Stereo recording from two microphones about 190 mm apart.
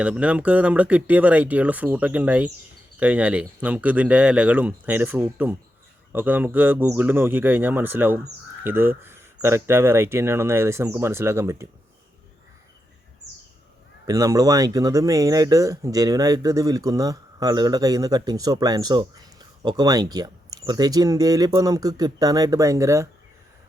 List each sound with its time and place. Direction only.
0.0 s speech: 5° right (ahead or behind)
14.1 s speech: 20° right (ahead or behind)